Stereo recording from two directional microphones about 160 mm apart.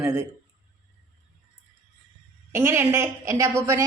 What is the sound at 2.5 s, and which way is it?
A woman's voice, 15° right (ahead or behind).